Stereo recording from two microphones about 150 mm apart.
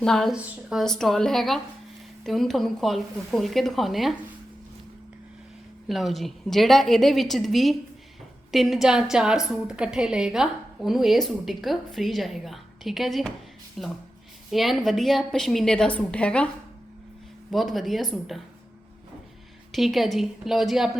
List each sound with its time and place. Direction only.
0.0 s a woman's voice: 5° left (ahead or behind)
5.9 s a woman's voice: centre (ahead or behind)
17.5 s a woman's voice: centre (ahead or behind)
19.7 s a woman's voice: centre (ahead or behind)